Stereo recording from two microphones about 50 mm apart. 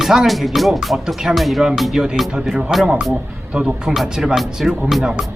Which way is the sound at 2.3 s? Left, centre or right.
Centre.